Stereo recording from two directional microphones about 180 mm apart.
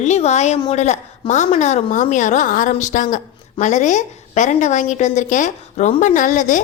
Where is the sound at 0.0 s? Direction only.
40° left (ahead or behind).